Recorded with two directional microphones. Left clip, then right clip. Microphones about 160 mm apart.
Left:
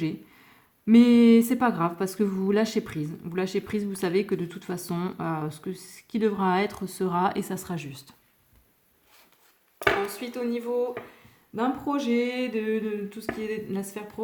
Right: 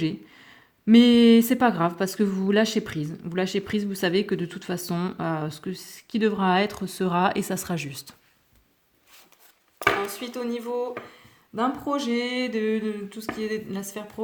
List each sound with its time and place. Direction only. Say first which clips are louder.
0.0 s speech: right 3 dB; 30° right (ahead or behind)
9.7 s speech: right 1 dB; 30° right (ahead or behind)